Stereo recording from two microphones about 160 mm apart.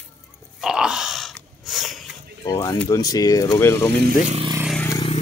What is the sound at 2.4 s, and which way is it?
Speech, 25° left (ahead or behind).